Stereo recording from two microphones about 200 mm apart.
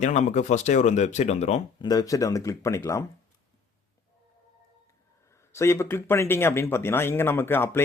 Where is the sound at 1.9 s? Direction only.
15° left (ahead or behind).